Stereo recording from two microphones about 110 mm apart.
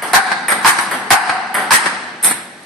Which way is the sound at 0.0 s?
Centre (ahead or behind).